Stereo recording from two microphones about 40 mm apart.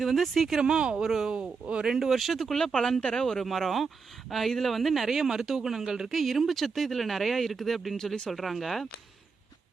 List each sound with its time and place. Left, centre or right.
0.0 s speech: centre
0.6 s speech: right
1.0 s speech: centre
1.3 s speech: right
1.9 s speech: centre
3.4 s speech: centre
6.1 s speech: centre